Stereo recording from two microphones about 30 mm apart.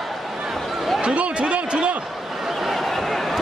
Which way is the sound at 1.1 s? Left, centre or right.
Right.